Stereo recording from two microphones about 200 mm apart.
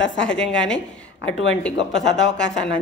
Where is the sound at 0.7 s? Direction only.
65° left (ahead or behind).